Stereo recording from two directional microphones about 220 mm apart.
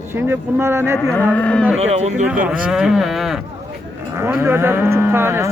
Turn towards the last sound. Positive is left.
turn(degrees=-10)  # may be behind; listen again after turning